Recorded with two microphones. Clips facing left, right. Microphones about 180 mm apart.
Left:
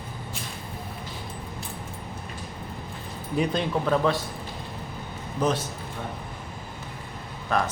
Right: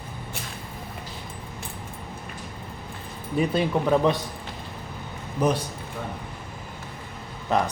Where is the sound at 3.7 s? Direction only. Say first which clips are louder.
Right 2 dB; 15° right (ahead or behind).